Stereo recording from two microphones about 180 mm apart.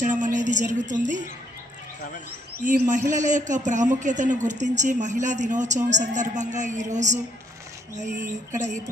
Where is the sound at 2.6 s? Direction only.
45° right (ahead or behind).